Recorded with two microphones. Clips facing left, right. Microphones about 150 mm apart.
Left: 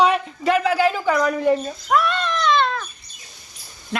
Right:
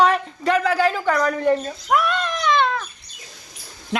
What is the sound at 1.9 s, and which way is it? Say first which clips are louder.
Cat: even; 10° right (ahead or behind).